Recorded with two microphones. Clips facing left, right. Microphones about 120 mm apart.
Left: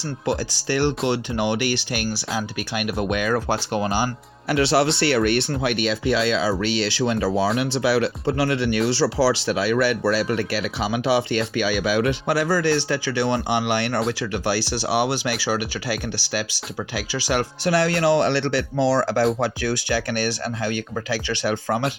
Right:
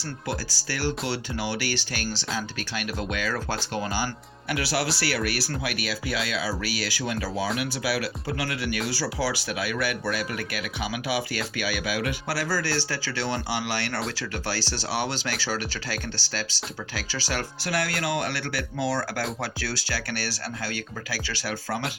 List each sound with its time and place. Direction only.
0.3 s speech: 25° left (ahead or behind)